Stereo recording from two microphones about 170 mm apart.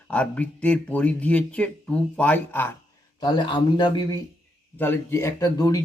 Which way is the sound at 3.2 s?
25° left (ahead or behind).